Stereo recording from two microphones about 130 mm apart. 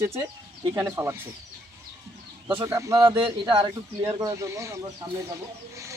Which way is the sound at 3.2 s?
40° right (ahead or behind).